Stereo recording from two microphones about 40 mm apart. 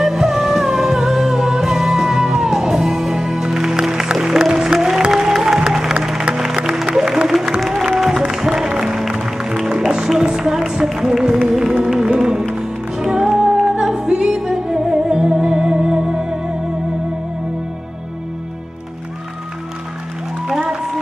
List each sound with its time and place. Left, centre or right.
0.0 s music: centre
20.4 s music: centre